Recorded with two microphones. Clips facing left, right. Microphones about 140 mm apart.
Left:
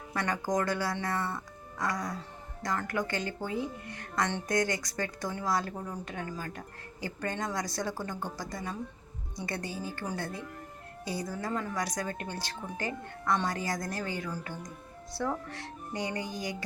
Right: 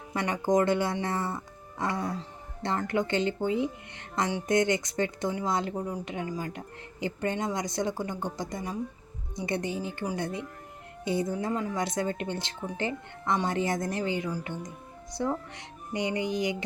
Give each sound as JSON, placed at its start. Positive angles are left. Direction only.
{"t": 0.1, "sound": "speech", "side_deg": -20}